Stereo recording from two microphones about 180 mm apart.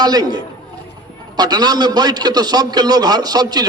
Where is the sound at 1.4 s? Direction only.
20° right (ahead or behind).